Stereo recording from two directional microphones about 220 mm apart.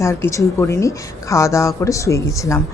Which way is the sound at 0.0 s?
15° left (ahead or behind).